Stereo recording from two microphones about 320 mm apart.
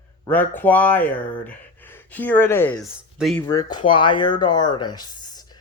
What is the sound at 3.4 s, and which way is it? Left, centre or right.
Speech, centre.